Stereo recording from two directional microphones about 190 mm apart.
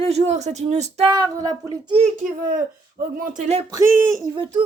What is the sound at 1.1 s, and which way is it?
Speech, 20° right (ahead or behind).